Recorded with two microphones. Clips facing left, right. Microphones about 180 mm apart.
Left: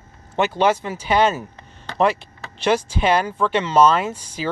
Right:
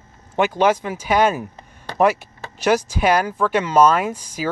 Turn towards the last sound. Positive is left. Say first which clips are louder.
# right 1 dB
turn(degrees=-10)  # may be behind; listen again after turning